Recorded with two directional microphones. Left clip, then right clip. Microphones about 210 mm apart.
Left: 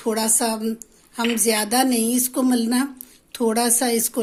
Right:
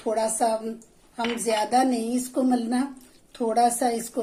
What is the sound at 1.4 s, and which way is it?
Speech, 50° left (ahead or behind).